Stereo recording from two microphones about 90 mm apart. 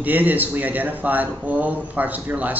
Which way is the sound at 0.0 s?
20° right (ahead or behind).